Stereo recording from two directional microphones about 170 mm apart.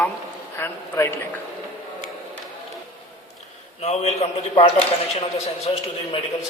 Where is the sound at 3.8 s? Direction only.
40° left (ahead or behind).